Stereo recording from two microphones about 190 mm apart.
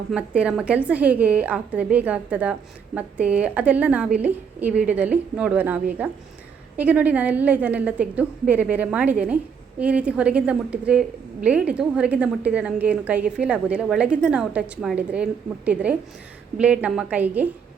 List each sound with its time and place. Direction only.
0.1 s a woman's voice: 5° right (ahead or behind)